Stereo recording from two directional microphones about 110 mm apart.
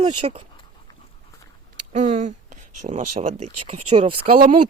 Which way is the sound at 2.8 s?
90° right.